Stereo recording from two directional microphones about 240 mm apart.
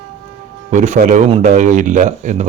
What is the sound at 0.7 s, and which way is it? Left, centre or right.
Speech, right.